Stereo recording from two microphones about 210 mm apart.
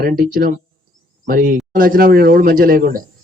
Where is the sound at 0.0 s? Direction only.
45° right (ahead or behind).